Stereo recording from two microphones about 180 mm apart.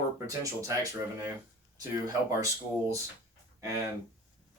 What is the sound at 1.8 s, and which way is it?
Speech, 15° right (ahead or behind).